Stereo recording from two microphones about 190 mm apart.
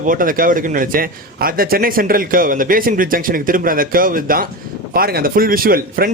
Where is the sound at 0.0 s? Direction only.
45° right (ahead or behind).